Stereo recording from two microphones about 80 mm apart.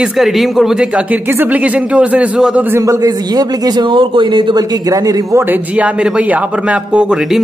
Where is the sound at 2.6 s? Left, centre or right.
Right.